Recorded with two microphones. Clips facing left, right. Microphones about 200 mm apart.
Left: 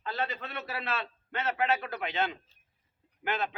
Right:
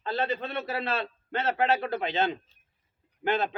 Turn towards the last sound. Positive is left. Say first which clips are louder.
# right 6 dB
turn(degrees=-30)  # may be behind; listen again after turning